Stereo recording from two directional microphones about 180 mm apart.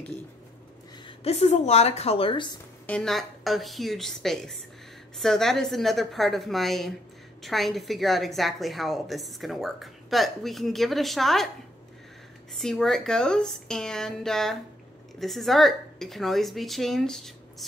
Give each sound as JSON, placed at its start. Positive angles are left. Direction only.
{"t": 1.0, "sound": "speech", "side_deg": 35}
{"t": 2.9, "sound": "a woman's voice", "side_deg": 5}
{"t": 12.5, "sound": "a woman's voice", "side_deg": 0}